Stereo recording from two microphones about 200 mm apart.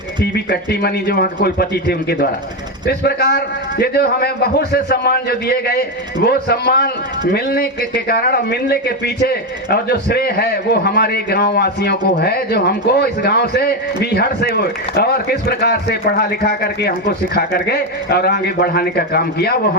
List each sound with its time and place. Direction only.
0.3 s a man's voice: 55° left (ahead or behind)